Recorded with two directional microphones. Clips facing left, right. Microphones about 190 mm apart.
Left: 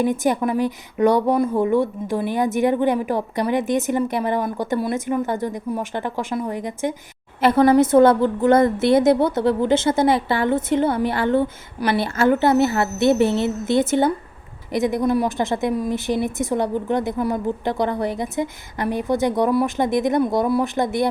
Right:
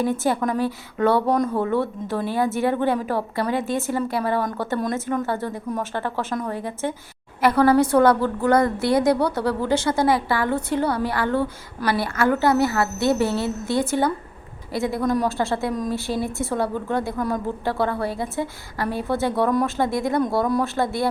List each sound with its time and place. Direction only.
0.0 s a woman's voice: 15° left (ahead or behind)